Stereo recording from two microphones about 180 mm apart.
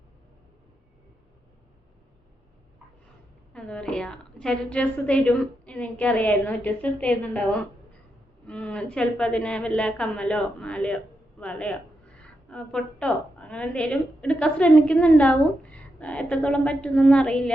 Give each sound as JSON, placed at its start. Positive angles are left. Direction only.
{"t": 3.5, "sound": "a woman's voice", "side_deg": 5}